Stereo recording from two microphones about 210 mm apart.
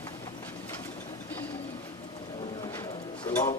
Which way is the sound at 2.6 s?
20° left (ahead or behind).